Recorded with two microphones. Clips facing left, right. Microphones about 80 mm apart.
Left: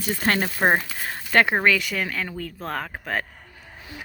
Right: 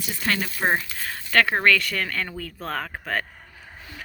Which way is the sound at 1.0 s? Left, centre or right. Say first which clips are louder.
Left 1 dB; left.